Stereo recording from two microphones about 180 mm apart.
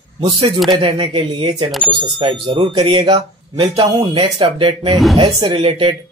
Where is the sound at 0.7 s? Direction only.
30° right (ahead or behind).